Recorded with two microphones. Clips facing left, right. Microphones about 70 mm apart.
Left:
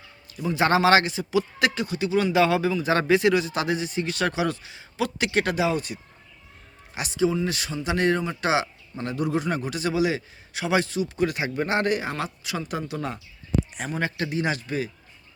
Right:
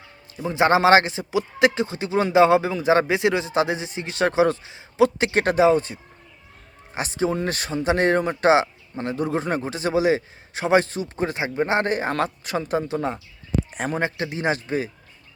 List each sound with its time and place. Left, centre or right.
0.3 s a man's voice: right
13.7 s a man's voice: right
14.0 s a man's voice: right